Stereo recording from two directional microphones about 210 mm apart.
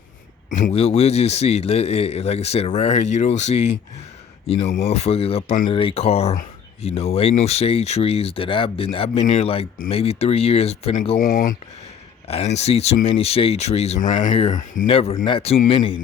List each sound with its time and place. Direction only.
0.5 s speech: 30° left (ahead or behind)
4.8 s speech: 30° left (ahead or behind)
11.2 s speech: 40° left (ahead or behind)
12.3 s speech: 30° left (ahead or behind)
14.8 s speech: 25° left (ahead or behind)